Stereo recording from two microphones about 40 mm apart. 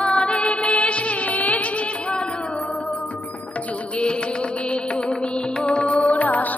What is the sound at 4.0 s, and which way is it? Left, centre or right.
Music, left.